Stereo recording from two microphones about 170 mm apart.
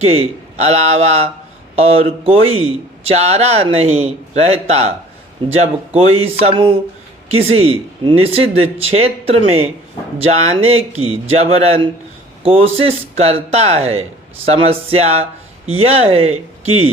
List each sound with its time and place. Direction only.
0.0 s speech: 35° right (ahead or behind)